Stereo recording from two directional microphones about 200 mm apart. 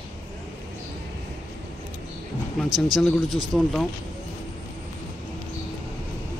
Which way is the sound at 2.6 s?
20° right (ahead or behind).